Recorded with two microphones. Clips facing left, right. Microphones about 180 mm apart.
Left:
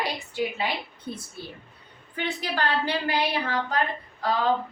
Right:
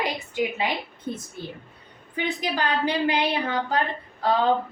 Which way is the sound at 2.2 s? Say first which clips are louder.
Right 2 dB; 15° right (ahead or behind).